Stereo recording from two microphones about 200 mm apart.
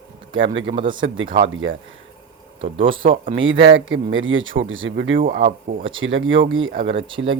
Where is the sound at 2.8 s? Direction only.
80° right.